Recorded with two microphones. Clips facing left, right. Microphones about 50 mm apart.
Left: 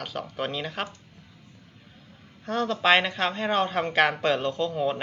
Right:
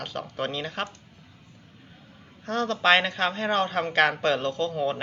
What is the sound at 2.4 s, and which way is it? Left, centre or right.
Speech, centre.